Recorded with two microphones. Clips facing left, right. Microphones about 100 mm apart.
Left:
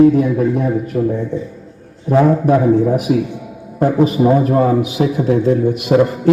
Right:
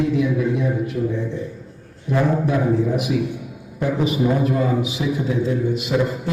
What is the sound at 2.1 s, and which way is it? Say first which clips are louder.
A man's voice: left 8 dB; 50° left (ahead or behind).